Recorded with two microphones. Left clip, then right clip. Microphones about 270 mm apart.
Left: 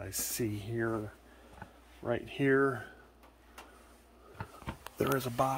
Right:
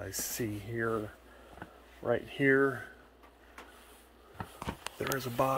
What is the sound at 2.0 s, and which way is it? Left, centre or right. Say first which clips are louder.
Speech: right 3 dB; centre.